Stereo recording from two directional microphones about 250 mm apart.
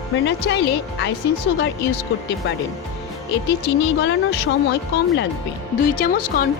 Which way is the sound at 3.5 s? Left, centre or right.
Left.